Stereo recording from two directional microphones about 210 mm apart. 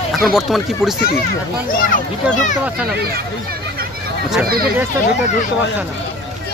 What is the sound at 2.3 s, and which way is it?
Speech, 35° left (ahead or behind).